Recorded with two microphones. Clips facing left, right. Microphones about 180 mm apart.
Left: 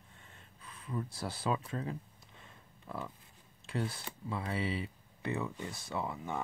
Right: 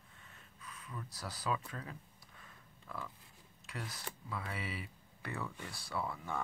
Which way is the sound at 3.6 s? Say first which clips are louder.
Left 8 dB; 30° left (ahead or behind).